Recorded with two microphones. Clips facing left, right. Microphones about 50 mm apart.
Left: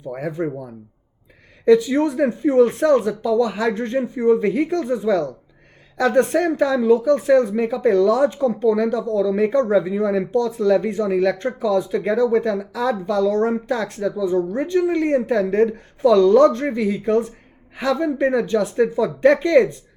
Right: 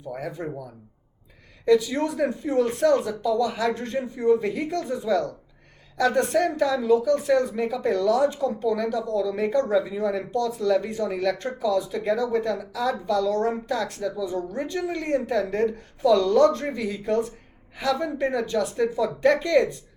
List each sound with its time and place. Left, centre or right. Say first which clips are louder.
0.1 s speech: left 6 dB; left
1.6 s speech: left 6 dB; left